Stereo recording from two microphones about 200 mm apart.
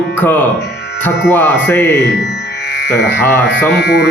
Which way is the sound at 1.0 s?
10° left (ahead or behind).